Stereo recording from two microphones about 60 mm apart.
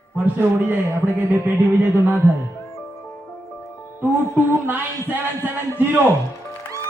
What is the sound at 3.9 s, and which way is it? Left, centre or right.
Music, right.